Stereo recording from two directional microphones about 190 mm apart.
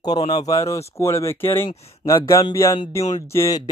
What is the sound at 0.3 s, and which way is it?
Speech, 20° left (ahead or behind).